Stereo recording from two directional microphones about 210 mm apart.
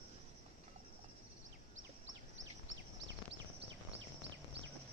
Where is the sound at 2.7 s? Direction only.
60° right (ahead or behind).